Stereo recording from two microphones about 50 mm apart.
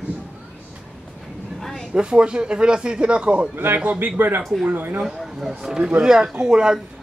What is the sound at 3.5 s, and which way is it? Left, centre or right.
Speech, right.